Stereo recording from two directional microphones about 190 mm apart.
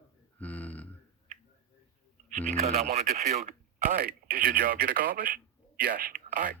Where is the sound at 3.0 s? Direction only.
40° right (ahead or behind).